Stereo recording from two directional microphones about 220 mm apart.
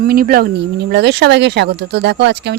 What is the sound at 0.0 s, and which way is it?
Speech, 40° right (ahead or behind).